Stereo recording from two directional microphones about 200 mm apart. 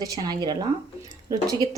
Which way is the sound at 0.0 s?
20° right (ahead or behind).